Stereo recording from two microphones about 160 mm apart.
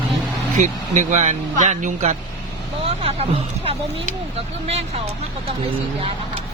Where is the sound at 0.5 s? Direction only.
50° right (ahead or behind).